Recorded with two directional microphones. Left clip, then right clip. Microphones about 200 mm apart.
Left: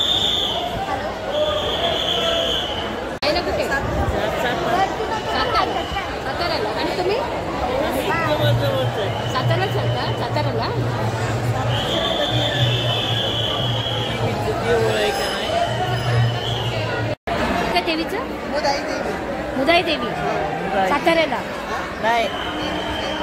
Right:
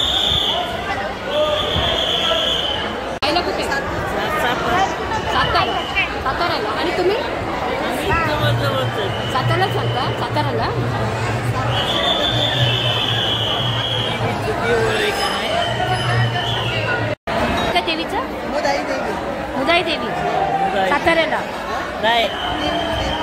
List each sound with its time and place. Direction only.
19.6 s chatter: 10° left (ahead or behind)